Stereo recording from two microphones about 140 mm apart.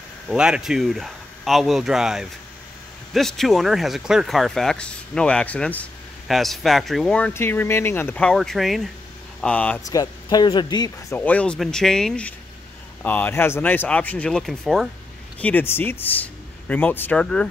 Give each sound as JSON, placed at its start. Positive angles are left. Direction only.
{"t": 0.3, "sound": "speech", "side_deg": -5}
{"t": 8.2, "sound": "speech", "side_deg": 5}
{"t": 9.8, "sound": "speech", "side_deg": 30}
{"t": 11.1, "sound": "speech", "side_deg": 10}
{"t": 15.4, "sound": "speech", "side_deg": 15}